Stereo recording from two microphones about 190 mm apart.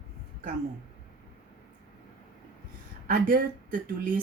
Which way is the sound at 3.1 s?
50° right (ahead or behind).